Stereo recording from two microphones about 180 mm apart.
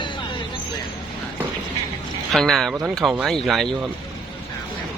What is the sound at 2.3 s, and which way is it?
Speech, centre (ahead or behind).